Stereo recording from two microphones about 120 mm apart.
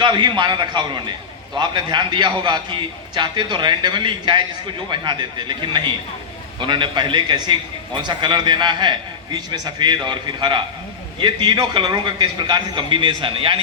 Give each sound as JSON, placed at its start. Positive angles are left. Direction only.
{"t": 0.0, "sound": "a man's voice", "side_deg": -40}